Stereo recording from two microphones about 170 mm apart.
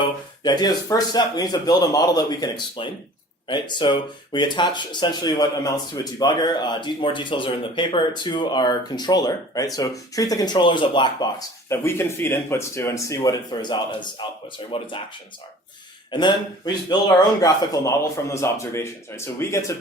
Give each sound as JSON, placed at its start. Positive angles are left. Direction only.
{"t": 0.4, "sound": "speech", "side_deg": 25}
{"t": 16.1, "sound": "a man's voice", "side_deg": 25}